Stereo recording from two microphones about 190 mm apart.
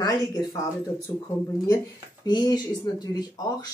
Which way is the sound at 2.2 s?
20° left (ahead or behind).